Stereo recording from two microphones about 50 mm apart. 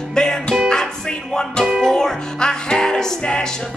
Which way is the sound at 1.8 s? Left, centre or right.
Centre.